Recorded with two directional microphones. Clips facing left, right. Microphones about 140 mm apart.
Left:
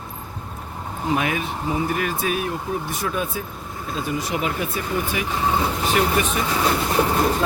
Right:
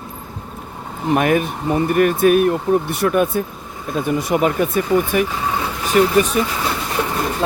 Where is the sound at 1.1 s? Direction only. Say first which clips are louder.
Right 7 dB; 50° right (ahead or behind).